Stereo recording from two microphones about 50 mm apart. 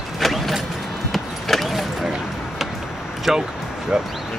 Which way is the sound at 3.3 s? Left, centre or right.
Centre.